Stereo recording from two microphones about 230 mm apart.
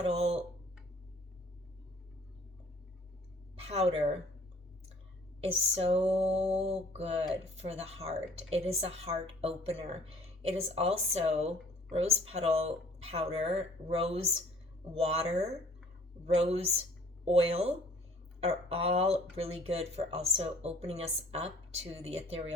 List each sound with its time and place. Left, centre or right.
0.0 s speech: right
3.7 s a woman's voice: right
5.7 s speech: right